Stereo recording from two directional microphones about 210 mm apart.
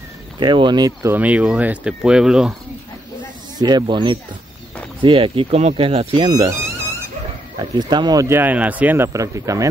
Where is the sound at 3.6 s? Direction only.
20° right (ahead or behind).